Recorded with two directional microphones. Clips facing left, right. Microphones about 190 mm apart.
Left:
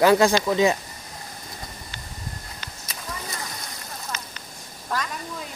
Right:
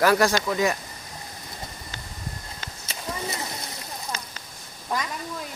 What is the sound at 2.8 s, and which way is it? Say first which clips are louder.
Clip-clop: right 4 dB; 25° right (ahead or behind).